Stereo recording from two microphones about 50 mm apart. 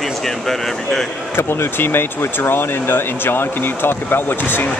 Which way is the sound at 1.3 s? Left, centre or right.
Left.